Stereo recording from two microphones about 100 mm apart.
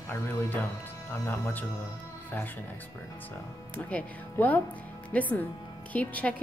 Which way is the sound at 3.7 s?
15° left (ahead or behind).